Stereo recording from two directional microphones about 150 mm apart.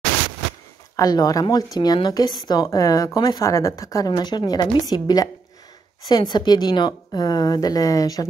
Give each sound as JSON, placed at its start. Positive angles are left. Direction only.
{"t": 0.9, "sound": "speech", "side_deg": 25}